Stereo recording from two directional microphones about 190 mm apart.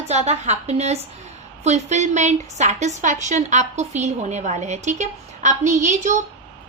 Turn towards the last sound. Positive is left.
turn(degrees=-40)  # may be behind; listen again after turning